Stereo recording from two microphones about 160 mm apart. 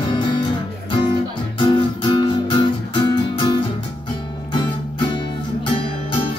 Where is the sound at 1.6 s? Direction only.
30° left (ahead or behind).